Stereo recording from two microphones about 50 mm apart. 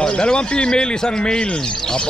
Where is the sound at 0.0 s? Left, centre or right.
Centre.